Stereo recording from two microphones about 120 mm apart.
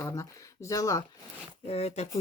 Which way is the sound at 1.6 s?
60° left (ahead or behind).